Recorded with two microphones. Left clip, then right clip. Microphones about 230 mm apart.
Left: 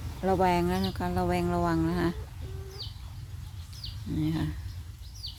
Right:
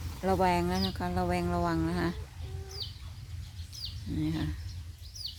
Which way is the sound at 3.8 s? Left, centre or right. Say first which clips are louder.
Right 1 dB; right.